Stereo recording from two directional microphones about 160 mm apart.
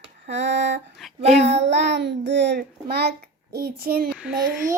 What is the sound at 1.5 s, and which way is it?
A child's voice, 90° right.